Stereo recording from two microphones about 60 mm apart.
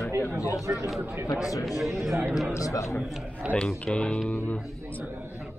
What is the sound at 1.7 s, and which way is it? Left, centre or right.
Speech, centre.